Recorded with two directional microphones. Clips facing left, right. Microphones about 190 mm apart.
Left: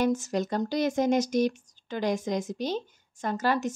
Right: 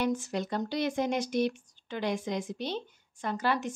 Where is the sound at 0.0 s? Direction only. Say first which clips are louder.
Left 4 dB; 45° left (ahead or behind).